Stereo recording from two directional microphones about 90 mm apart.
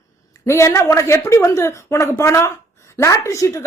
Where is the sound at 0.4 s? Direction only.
30° left (ahead or behind).